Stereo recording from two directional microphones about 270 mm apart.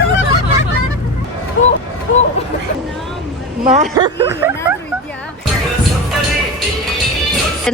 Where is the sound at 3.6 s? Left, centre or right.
Right.